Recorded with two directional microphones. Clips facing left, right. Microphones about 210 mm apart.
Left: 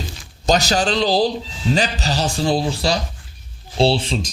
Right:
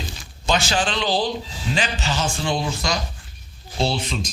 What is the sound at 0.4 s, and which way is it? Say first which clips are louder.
A man's voice: left 4 dB; 40° left (ahead or behind).